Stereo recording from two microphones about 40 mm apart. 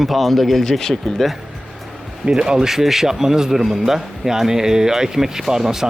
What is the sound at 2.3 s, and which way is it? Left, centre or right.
Speech, centre.